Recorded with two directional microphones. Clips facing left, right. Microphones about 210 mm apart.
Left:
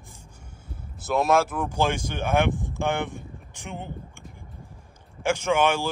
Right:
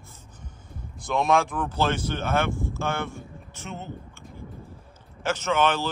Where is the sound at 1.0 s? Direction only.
Centre (ahead or behind).